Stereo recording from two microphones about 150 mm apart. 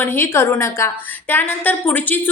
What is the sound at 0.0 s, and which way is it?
A woman's voice, 15° left (ahead or behind).